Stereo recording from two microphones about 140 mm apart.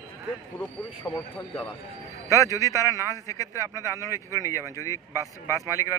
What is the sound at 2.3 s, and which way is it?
A man's voice, 25° left (ahead or behind).